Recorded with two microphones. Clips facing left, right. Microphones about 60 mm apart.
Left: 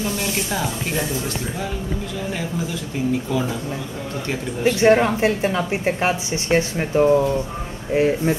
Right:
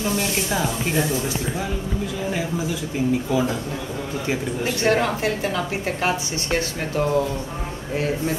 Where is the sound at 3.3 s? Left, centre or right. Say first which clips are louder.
Right 3 dB; centre.